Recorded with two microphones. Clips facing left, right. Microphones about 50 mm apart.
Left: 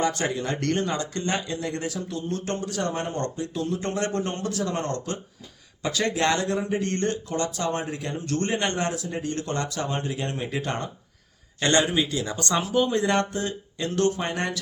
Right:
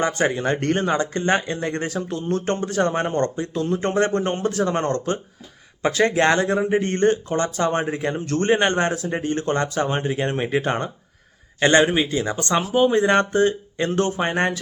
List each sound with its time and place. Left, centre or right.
0.0 s speech: right
11.6 s speech: right